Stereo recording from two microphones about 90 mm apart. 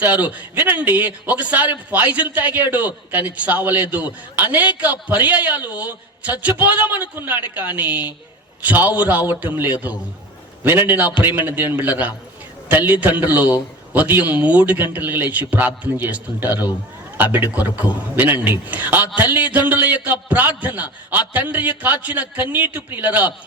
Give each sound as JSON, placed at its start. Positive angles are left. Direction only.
{"t": 0.0, "sound": "a man's voice", "side_deg": -20}